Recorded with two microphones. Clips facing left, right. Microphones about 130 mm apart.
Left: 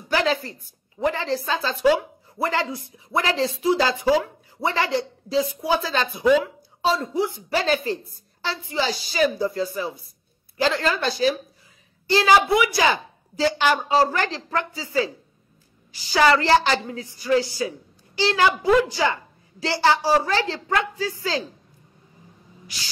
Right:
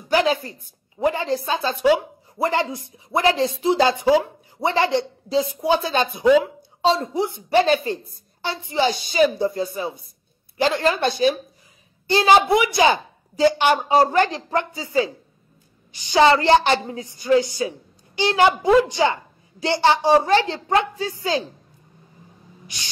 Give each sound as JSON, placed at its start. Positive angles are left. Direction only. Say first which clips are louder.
{"t": 0.1, "sound": "a woman's voice", "louder": "right 3 dB", "side_deg": -20}